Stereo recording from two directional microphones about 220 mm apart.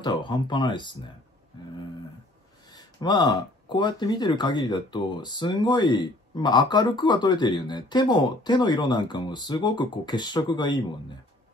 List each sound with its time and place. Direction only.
0.0 s speech: 20° left (ahead or behind)
2.7 s speech: 20° left (ahead or behind)